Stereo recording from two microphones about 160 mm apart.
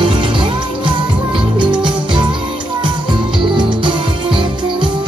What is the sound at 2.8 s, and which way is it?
Music, 30° right (ahead or behind).